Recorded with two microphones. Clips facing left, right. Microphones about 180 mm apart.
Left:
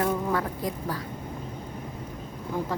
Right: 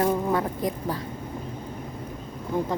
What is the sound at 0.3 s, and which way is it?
Speech, 20° right (ahead or behind).